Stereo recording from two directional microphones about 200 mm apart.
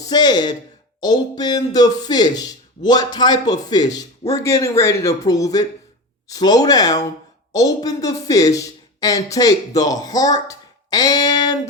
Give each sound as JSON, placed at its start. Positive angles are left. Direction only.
{"t": 0.0, "sound": "speech", "side_deg": 20}